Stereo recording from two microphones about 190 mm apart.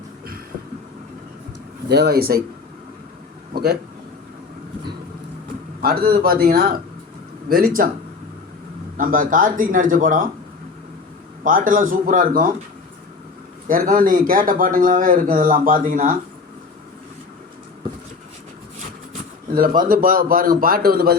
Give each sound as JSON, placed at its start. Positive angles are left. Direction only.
{"t": 1.9, "sound": "speech", "side_deg": -60}
{"t": 3.5, "sound": "speech", "side_deg": -55}
{"t": 5.8, "sound": "speech", "side_deg": -50}
{"t": 9.0, "sound": "speech", "side_deg": -45}
{"t": 11.4, "sound": "speech", "side_deg": -45}
{"t": 13.7, "sound": "speech", "side_deg": -45}
{"t": 19.1, "sound": "a sound", "side_deg": -45}
{"t": 19.9, "sound": "speech", "side_deg": -50}